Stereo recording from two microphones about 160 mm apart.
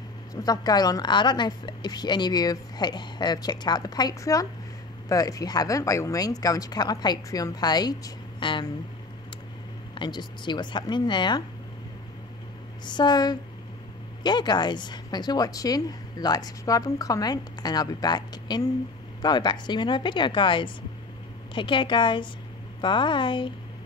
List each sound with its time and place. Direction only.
0.3 s a woman's voice: 25° left (ahead or behind)
9.9 s a woman's voice: 30° left (ahead or behind)
12.8 s a woman's voice: 25° left (ahead or behind)